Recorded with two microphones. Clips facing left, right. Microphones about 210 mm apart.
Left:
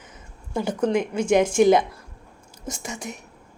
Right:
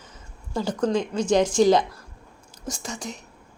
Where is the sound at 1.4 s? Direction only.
20° left (ahead or behind).